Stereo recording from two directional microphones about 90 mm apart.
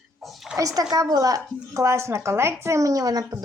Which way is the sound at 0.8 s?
50° right (ahead or behind).